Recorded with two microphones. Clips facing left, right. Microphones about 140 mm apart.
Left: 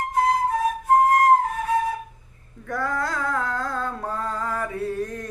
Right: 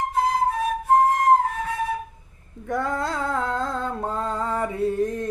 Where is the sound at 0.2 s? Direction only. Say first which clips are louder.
Left 2 dB; 25° right (ahead or behind).